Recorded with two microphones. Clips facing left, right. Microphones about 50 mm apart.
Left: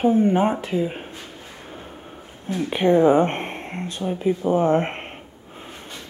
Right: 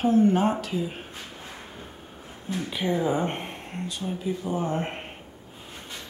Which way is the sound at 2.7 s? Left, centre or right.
Left.